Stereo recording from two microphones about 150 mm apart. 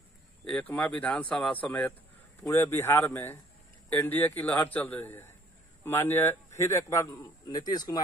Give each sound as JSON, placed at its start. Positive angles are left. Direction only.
{"t": 0.5, "sound": "speech", "side_deg": 10}
{"t": 7.2, "sound": "speech", "side_deg": 30}